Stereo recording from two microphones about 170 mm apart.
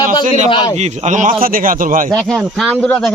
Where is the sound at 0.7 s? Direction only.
40° right (ahead or behind).